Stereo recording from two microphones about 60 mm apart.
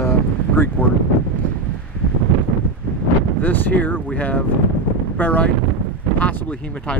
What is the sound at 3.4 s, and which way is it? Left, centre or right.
Speech, left.